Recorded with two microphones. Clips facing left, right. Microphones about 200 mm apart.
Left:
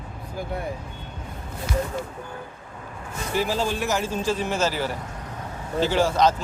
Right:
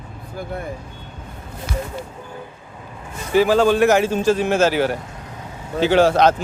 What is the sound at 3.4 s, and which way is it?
Speech, 65° right (ahead or behind).